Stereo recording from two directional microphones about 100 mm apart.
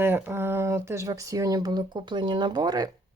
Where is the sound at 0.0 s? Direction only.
20° right (ahead or behind); by 2.9 s 40° right (ahead or behind).